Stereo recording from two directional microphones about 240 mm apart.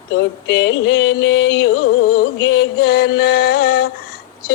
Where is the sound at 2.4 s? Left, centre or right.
Left.